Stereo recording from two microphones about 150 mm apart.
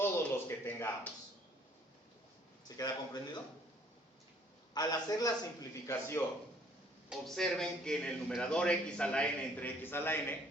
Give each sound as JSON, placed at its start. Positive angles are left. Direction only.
{"t": 0.0, "sound": "speech", "side_deg": 15}
{"t": 2.6, "sound": "speech", "side_deg": 25}
{"t": 4.7, "sound": "a man's voice", "side_deg": 25}
{"t": 7.1, "sound": "a man's voice", "side_deg": 5}